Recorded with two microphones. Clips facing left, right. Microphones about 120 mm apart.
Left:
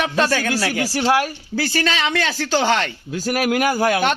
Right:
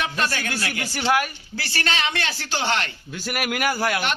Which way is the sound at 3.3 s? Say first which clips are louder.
Left 6 dB; 35° left (ahead or behind).